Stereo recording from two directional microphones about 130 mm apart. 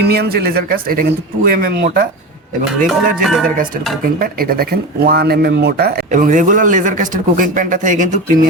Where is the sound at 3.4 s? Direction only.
90° right.